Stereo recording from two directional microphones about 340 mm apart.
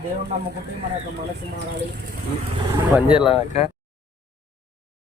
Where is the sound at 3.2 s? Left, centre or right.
Centre.